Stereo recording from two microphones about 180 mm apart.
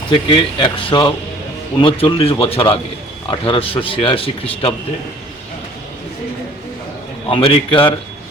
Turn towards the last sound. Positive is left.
turn(degrees=30)  # may be behind; listen again after turning